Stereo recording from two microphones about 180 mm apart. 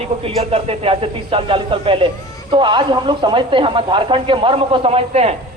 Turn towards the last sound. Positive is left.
turn(degrees=-35)  # may be behind; listen again after turning